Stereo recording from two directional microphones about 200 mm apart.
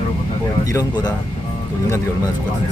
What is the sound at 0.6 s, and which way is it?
Speech, 20° left (ahead or behind).